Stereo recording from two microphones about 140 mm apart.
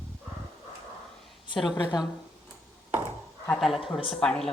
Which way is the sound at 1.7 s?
30° left (ahead or behind).